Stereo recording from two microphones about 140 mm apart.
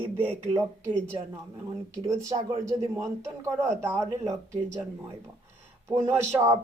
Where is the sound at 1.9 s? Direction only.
20° right (ahead or behind).